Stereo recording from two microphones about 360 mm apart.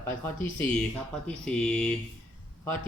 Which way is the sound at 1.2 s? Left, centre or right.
Centre.